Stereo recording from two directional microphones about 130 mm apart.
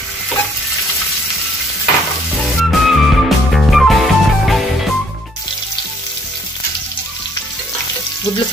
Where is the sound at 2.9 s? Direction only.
Centre (ahead or behind).